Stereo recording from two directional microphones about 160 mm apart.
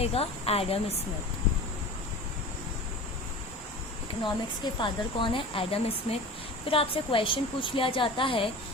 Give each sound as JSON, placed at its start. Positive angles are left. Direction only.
{"t": 0.0, "sound": "speech", "side_deg": 40}
{"t": 4.2, "sound": "speech", "side_deg": 30}